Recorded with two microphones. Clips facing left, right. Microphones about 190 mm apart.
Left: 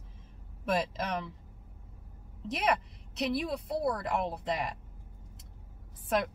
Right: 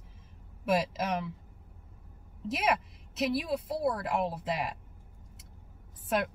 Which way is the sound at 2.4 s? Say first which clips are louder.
Right 1 dB; 5° right (ahead or behind).